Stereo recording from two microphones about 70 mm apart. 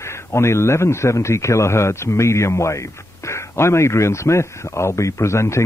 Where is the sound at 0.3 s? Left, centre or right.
Left.